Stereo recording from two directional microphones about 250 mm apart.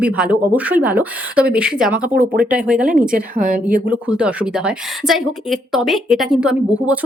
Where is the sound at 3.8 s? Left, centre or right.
Centre.